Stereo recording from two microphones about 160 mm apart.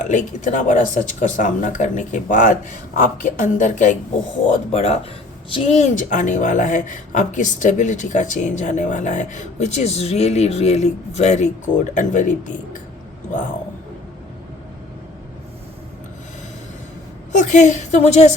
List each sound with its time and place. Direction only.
0.0 s a woman's voice: 50° left (ahead or behind)
17.3 s a woman's voice: 50° left (ahead or behind)